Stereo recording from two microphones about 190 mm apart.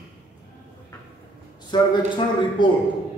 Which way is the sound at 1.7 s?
25° left (ahead or behind).